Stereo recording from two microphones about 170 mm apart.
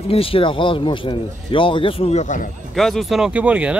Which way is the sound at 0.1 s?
30° left (ahead or behind).